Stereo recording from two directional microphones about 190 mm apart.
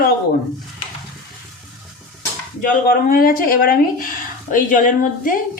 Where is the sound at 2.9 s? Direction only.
50° left (ahead or behind).